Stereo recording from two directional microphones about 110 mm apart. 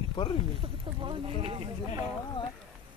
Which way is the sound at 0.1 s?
50° left (ahead or behind).